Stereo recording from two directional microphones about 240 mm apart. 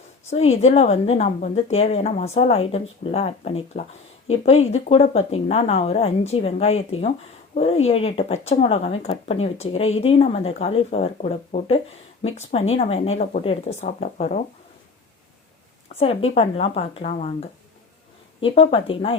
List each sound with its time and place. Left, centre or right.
0.3 s speech: left
15.9 s speech: left